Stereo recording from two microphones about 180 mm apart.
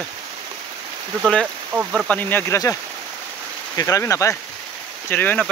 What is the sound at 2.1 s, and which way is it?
Speech, 10° left (ahead or behind).